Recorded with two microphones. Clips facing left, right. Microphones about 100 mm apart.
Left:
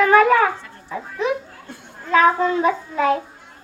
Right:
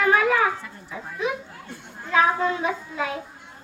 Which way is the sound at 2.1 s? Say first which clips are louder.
Left 5 dB; 50° left (ahead or behind).